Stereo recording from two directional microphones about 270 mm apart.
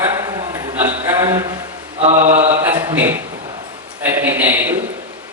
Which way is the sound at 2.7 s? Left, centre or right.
Centre.